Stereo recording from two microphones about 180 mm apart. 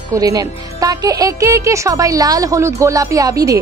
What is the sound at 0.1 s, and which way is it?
Speech, 20° right (ahead or behind).